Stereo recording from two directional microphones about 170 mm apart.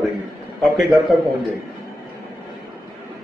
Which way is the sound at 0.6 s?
Centre (ahead or behind).